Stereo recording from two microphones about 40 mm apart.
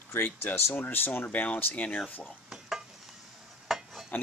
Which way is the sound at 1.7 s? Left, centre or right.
Left.